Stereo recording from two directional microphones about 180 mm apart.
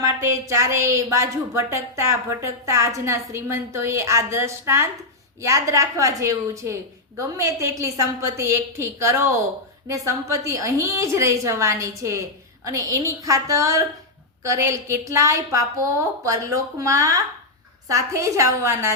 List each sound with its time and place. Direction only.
0.0 s a woman's voice: 15° right (ahead or behind)